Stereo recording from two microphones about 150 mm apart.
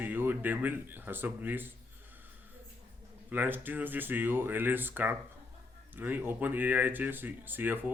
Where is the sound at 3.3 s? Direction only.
10° right (ahead or behind).